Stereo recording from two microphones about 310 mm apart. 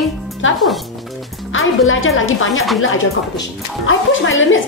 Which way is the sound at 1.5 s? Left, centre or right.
Left.